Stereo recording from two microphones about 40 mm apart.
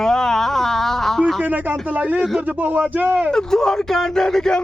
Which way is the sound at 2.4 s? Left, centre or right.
Right.